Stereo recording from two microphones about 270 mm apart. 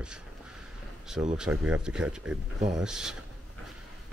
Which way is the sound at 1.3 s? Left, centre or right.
Centre.